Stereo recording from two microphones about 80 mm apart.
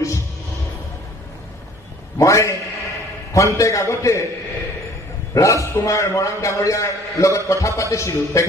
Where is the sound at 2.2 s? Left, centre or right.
Left.